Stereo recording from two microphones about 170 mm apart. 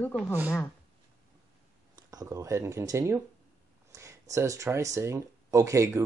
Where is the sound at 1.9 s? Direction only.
20° right (ahead or behind).